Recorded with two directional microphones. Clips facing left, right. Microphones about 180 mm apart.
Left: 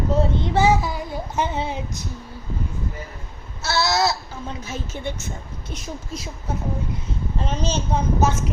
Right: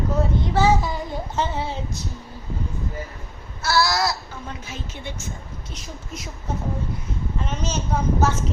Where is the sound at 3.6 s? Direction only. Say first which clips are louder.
Even; 25° left (ahead or behind).